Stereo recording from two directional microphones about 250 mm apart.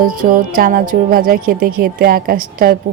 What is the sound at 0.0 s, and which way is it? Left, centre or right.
A woman's voice, right.